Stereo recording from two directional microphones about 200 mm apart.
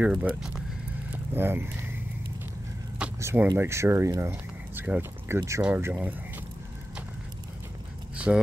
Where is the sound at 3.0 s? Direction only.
10° right (ahead or behind).